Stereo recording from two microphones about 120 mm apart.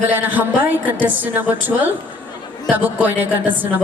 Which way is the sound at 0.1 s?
15° right (ahead or behind).